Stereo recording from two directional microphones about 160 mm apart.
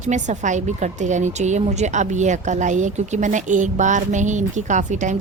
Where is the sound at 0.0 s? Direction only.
50° right (ahead or behind).